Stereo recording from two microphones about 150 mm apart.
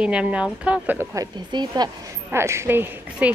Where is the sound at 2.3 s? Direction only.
15° right (ahead or behind).